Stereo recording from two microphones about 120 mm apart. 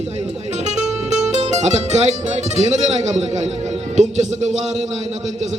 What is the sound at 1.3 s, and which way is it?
Speech, 75° right (ahead or behind).